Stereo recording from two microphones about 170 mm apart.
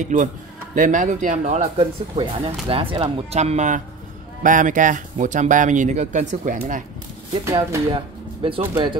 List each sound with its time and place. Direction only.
0.0 s speech: 50° right (ahead or behind)
1.8 s speech: 25° right (ahead or behind)
2.7 s speech: 35° right (ahead or behind); by 6.8 s 50° right (ahead or behind)
7.7 s speech: 30° right (ahead or behind)